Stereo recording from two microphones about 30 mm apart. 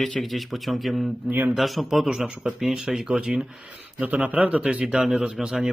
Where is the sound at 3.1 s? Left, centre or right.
Right.